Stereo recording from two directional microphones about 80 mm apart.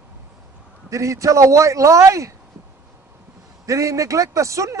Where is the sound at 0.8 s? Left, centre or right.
Right.